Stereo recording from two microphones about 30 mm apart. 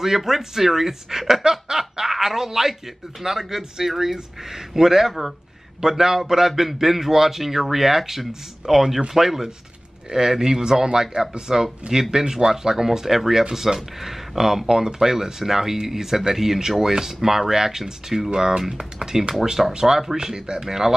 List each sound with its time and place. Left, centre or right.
0.0 s speech: centre
1.4 s snicker: centre
3.2 s speech: centre
10.1 s speech: right
10.4 s speech: centre